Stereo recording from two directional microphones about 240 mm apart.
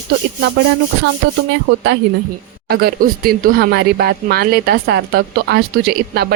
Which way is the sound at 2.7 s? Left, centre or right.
Right.